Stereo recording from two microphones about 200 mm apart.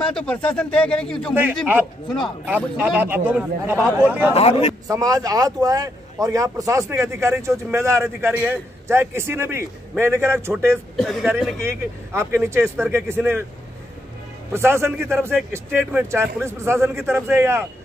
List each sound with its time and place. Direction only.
0.0 s speech: 5° left (ahead or behind)
1.3 s a man's voice: 10° right (ahead or behind)
2.0 s speech: centre (ahead or behind)
2.5 s a man's voice: 10° right (ahead or behind)
4.3 s a man's voice: 30° left (ahead or behind)
4.8 s a man's voice: 15° right (ahead or behind)
11.0 s speech: centre (ahead or behind)
11.3 s a man's voice: 10° right (ahead or behind)
14.5 s a man's voice: 10° right (ahead or behind)